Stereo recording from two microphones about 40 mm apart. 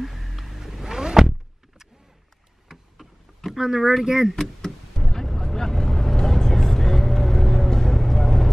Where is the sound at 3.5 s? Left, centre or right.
Centre.